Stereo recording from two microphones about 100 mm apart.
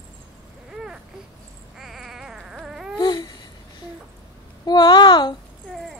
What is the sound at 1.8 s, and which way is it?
Baby cry, centre (ahead or behind).